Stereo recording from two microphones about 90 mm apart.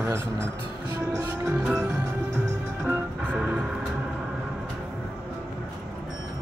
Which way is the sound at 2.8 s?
20° right (ahead or behind).